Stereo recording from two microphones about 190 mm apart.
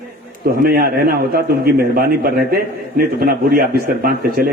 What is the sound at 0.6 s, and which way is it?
A man's voice, 50° right (ahead or behind).